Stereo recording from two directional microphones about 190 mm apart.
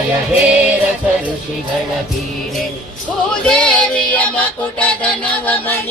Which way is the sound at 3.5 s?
5° left (ahead or behind).